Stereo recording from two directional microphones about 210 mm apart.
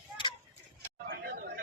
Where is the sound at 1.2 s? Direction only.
40° right (ahead or behind).